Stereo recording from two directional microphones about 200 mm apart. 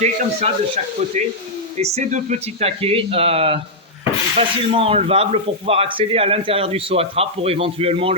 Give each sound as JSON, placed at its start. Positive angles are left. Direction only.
{"t": 0.0, "sound": "speech", "side_deg": -30}
{"t": 1.8, "sound": "speech", "side_deg": -35}